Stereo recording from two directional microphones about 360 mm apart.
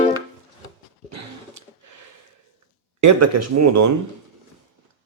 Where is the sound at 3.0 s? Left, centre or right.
Right.